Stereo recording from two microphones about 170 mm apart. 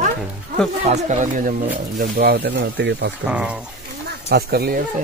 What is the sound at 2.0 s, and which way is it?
Speech, 65° right (ahead or behind).